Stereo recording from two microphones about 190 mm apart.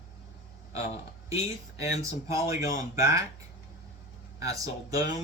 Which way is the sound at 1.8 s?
15° right (ahead or behind).